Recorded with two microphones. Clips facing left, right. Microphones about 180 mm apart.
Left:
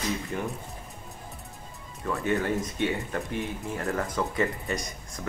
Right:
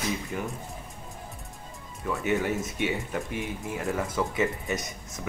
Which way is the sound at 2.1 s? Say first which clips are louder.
Even; centre (ahead or behind).